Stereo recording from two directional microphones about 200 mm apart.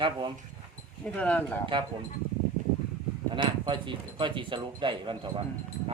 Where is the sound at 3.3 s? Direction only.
25° right (ahead or behind).